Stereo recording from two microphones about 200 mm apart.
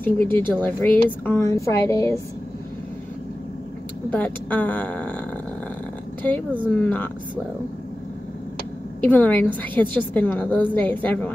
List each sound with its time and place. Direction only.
0.0 s a woman's voice: 10° left (ahead or behind)
4.1 s a woman's voice: 10° left (ahead or behind)
6.2 s a woman's voice: 10° left (ahead or behind)
9.0 s a woman's voice: 10° left (ahead or behind)